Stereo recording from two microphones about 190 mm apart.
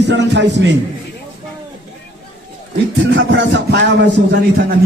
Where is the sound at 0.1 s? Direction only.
65° right (ahead or behind).